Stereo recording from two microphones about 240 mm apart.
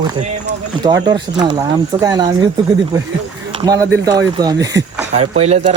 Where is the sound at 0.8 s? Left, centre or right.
Centre.